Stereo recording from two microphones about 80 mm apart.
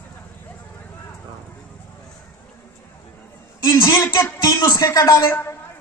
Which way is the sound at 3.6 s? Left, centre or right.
Left.